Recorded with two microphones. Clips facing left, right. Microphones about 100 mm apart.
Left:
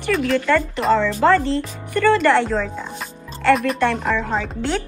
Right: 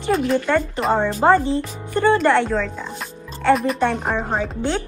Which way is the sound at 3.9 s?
90° left.